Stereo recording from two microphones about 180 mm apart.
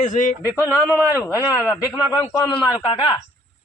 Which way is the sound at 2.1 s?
20° left (ahead or behind).